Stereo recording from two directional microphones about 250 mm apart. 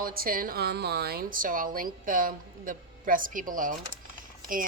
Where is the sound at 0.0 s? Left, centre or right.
Right.